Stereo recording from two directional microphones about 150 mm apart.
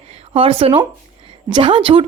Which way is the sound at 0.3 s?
40° right (ahead or behind).